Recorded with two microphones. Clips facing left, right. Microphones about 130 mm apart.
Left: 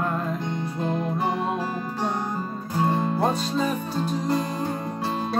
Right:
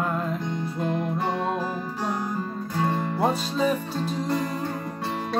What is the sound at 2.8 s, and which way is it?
Music, 20° left (ahead or behind).